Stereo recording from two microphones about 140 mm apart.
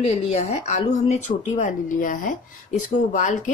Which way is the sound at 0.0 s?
50° left (ahead or behind).